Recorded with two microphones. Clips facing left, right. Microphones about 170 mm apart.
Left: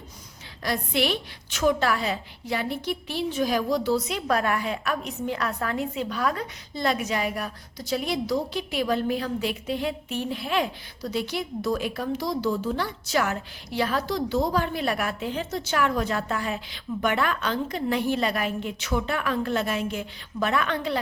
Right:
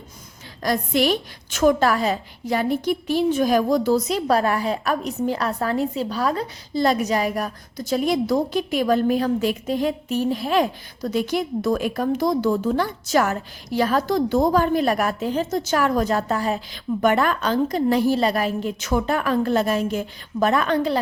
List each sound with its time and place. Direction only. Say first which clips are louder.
0.6 s a woman's voice: right 5 dB; 45° right (ahead or behind)